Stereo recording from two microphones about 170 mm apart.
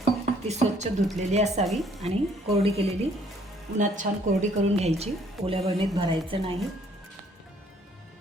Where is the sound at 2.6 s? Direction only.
35° right (ahead or behind).